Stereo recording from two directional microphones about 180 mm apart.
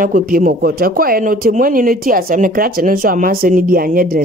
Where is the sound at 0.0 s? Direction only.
50° right (ahead or behind).